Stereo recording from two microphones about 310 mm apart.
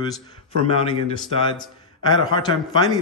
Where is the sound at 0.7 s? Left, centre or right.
Centre.